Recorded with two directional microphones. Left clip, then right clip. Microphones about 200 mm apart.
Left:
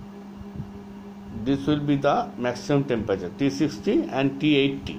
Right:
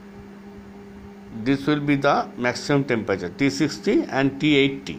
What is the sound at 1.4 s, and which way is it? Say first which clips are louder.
Speech: right 2 dB; 45° right (ahead or behind).